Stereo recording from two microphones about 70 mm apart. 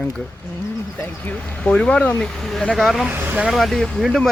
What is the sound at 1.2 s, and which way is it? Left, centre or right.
Speech, centre.